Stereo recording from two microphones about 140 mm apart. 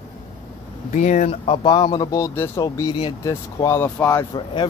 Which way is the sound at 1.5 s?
30° left (ahead or behind).